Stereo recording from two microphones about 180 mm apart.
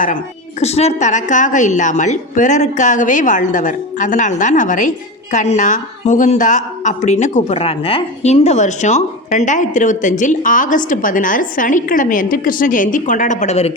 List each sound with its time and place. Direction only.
0.6 s a woman's voice: 35° left (ahead or behind)